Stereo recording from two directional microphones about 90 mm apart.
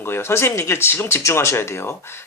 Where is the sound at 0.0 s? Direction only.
30° left (ahead or behind).